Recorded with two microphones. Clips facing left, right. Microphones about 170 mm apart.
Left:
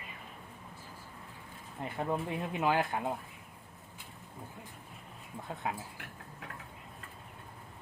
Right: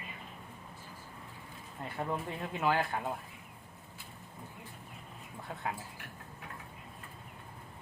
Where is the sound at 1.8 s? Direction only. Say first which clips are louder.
Left 2 dB; 15° left (ahead or behind).